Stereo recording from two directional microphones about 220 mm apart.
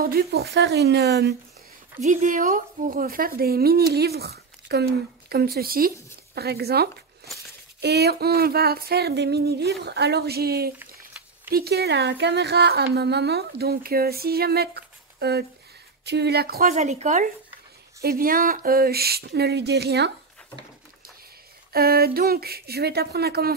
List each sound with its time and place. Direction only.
0.0 s speech: 45° right (ahead or behind)
2.0 s speech: 35° right (ahead or behind)
16.7 s speech: 30° right (ahead or behind); by 20.1 s 50° right (ahead or behind)
21.7 s speech: 45° right (ahead or behind)